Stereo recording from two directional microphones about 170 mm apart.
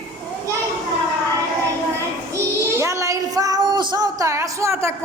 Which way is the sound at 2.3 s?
15° right (ahead or behind).